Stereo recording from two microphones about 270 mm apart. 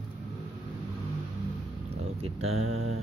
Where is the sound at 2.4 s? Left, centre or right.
Right.